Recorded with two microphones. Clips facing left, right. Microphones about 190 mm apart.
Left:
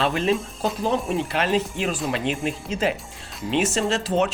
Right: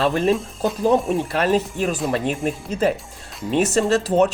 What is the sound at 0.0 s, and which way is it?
Speech, 45° right (ahead or behind).